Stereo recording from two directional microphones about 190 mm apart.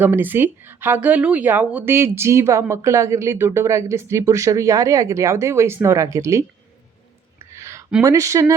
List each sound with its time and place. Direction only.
0.0 s speech: 10° right (ahead or behind)
7.3 s a sound: 15° right (ahead or behind)
8.0 s speech: 15° right (ahead or behind)